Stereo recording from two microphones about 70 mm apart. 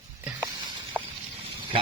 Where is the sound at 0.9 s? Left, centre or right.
Right.